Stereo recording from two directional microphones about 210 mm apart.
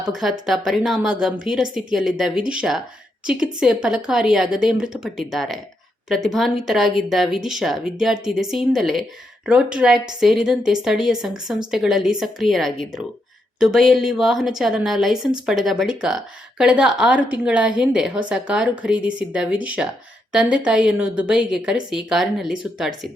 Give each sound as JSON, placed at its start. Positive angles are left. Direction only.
{"t": 0.1, "sound": "a woman's voice", "side_deg": 0}